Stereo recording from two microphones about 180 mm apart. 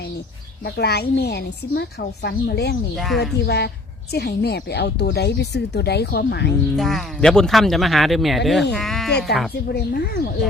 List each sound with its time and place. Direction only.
0.6 s a woman's voice: 65° left (ahead or behind)
2.9 s speech: centre (ahead or behind)
3.2 s a woman's voice: 65° left (ahead or behind)
6.7 s speech: centre (ahead or behind)
9.6 s a woman's voice: 60° left (ahead or behind)